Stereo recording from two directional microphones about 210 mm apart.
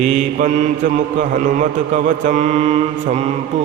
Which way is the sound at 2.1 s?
35° right (ahead or behind).